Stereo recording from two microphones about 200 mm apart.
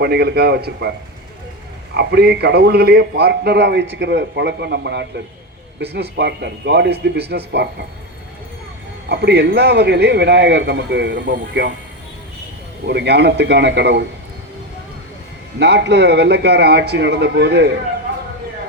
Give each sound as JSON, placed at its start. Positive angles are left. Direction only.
{"t": 0.0, "sound": "a man's voice", "side_deg": -55}
{"t": 2.0, "sound": "a man's voice", "side_deg": -55}
{"t": 9.0, "sound": "a man's voice", "side_deg": -55}
{"t": 12.8, "sound": "a man's voice", "side_deg": -55}
{"t": 15.5, "sound": "a man's voice", "side_deg": -60}